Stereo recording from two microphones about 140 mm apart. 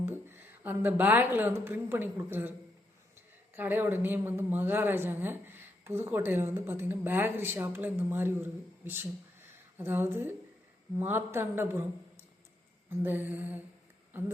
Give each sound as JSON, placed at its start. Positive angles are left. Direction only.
{"t": 0.0, "sound": "a woman's voice", "side_deg": -15}
{"t": 13.0, "sound": "speech", "side_deg": -15}